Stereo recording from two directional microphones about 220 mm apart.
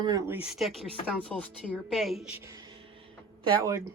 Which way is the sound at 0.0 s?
15° right (ahead or behind).